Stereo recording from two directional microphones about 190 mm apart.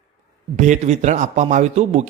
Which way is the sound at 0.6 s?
35° right (ahead or behind).